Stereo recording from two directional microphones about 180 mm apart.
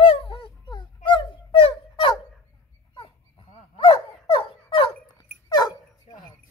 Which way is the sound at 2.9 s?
30° left (ahead or behind).